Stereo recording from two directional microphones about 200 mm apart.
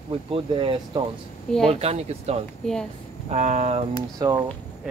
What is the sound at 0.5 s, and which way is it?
Speech, 25° right (ahead or behind).